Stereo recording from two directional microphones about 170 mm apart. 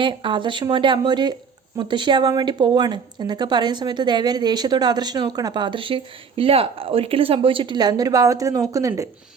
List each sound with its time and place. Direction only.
0.0 s a woman's voice: 30° right (ahead or behind)